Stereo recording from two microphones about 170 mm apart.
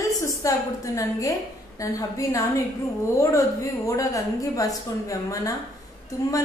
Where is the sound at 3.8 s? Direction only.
20° left (ahead or behind).